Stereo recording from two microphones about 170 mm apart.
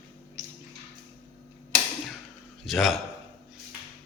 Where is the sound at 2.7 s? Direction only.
Centre (ahead or behind).